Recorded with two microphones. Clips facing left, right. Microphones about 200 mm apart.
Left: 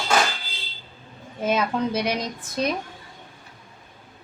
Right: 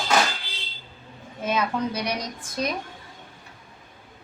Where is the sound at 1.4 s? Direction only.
25° left (ahead or behind).